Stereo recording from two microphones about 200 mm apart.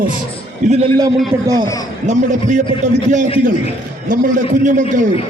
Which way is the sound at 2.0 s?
35° right (ahead or behind).